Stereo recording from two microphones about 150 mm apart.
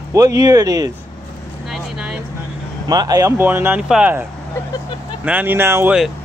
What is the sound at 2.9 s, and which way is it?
Speech, 25° right (ahead or behind).